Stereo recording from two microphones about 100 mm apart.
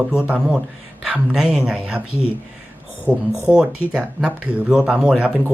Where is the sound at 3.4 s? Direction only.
10° right (ahead or behind).